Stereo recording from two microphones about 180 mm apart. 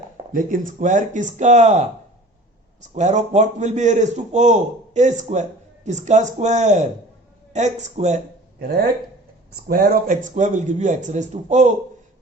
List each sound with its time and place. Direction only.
0.3 s speech: 45° right (ahead or behind)
2.9 s a man's voice: 40° right (ahead or behind)
8.5 s speech: 55° right (ahead or behind)